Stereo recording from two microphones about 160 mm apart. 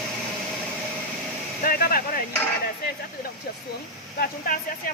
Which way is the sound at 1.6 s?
70° left (ahead or behind).